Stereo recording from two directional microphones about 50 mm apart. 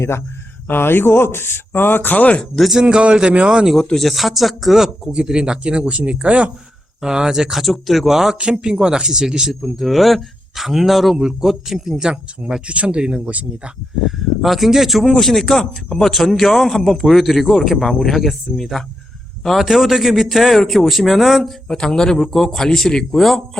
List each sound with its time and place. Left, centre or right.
0.7 s speech: left
2.6 s a man's voice: centre
2.8 s speech: centre
3.9 s a man's voice: centre
5.1 s speech: centre
7.0 s a man's voice: centre
12.0 s speech: right
14.2 s a man's voice: centre
15.0 s a man's voice: centre
21.8 s a man's voice: centre